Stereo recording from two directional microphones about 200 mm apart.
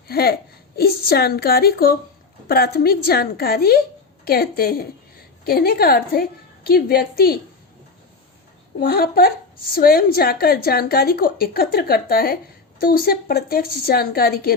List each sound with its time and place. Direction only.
0.1 s a woman's voice: 50° left (ahead or behind)
8.8 s speech: 50° left (ahead or behind)